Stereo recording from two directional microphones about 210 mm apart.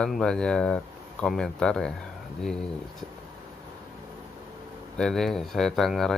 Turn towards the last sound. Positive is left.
turn(degrees=0)  # may be behind; listen again after turning